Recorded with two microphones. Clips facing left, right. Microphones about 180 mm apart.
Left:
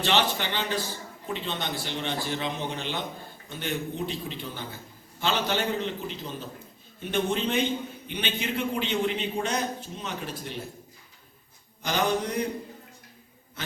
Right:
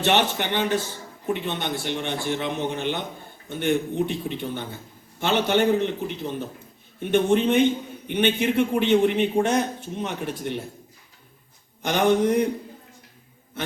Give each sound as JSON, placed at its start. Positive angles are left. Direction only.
{"t": 0.0, "sound": "a man's voice", "side_deg": -55}
{"t": 11.9, "sound": "a man's voice", "side_deg": -60}